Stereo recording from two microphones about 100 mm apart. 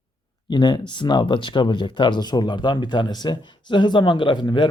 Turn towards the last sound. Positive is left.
turn(degrees=50)  # may be behind; listen again after turning